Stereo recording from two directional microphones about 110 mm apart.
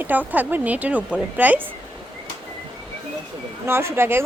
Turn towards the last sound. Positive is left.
turn(degrees=-20)  # may be behind; listen again after turning